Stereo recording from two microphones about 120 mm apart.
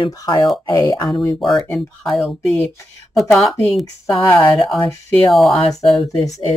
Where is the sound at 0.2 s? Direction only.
30° left (ahead or behind).